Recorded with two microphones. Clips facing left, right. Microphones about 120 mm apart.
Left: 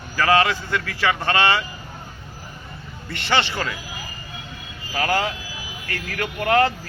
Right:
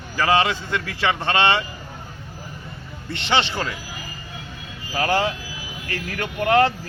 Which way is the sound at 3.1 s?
20° right (ahead or behind).